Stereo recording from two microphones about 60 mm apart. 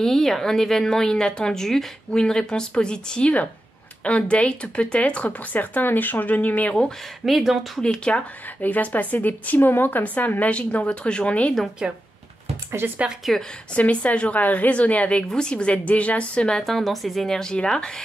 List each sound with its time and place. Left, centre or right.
0.0 s speech: centre; by 6.7 s left
7.2 s speech: centre
7.8 s speech: centre
8.5 s speech: left
11.8 s speech: centre
12.8 s speech: right
13.2 s speech: centre
13.7 s speech: left
16.6 s speech: centre